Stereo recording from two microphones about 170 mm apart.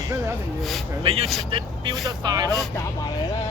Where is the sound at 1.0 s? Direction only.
35° right (ahead or behind).